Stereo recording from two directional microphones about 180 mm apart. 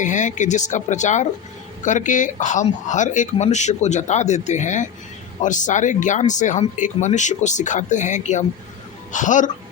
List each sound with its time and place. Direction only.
0.0 s speech: 45° left (ahead or behind)